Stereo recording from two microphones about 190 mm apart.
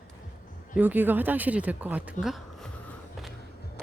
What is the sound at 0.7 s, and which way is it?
Speech, 10° right (ahead or behind).